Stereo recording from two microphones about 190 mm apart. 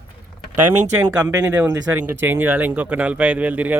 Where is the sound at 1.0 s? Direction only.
10° right (ahead or behind).